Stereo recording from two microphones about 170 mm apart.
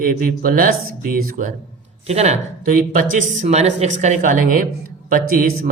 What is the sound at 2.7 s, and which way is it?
Speech, 50° right (ahead or behind).